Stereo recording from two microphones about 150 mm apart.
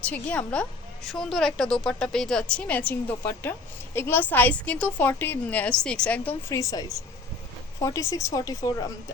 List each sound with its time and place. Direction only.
0.0 s a woman's voice: 10° left (ahead or behind)
6.5 s a woman's voice: 20° left (ahead or behind)